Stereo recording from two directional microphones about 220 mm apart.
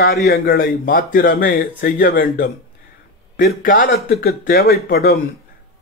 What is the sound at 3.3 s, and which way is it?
A man's voice, 40° left (ahead or behind).